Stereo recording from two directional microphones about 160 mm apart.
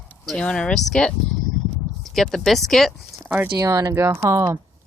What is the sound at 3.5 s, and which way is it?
Speech, 20° right (ahead or behind).